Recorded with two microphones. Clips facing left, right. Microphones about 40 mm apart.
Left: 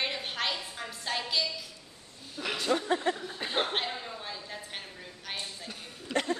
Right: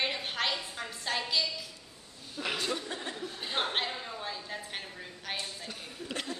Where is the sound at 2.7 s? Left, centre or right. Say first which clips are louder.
Left 8 dB; left.